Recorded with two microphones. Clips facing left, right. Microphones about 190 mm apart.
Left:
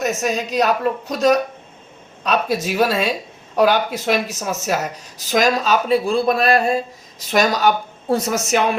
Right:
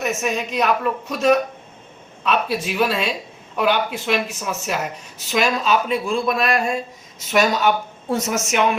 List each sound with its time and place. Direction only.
0.0 s speech: 35° left (ahead or behind)